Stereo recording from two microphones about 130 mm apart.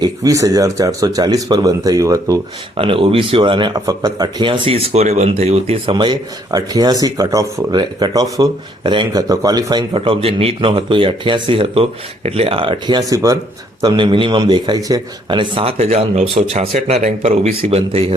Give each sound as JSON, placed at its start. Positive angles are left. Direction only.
{"t": 0.0, "sound": "speech", "side_deg": -25}
{"t": 2.7, "sound": "speech", "side_deg": -45}
{"t": 9.2, "sound": "speech", "side_deg": -25}
{"t": 9.9, "sound": "speech", "side_deg": -45}
{"t": 13.0, "sound": "speech", "side_deg": -25}
{"t": 13.8, "sound": "speech", "side_deg": -35}
{"t": 15.8, "sound": "speech", "side_deg": -55}